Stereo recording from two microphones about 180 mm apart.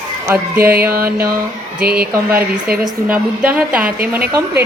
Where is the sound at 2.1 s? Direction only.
15° right (ahead or behind).